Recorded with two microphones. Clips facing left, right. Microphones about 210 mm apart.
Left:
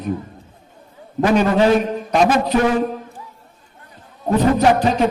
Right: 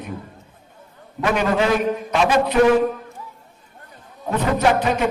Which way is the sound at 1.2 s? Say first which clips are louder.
Left 5 dB; 35° left (ahead or behind).